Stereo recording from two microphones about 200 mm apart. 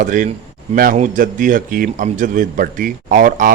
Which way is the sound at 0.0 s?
40° right (ahead or behind).